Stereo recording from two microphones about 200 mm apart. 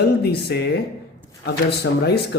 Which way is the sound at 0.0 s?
55° left (ahead or behind).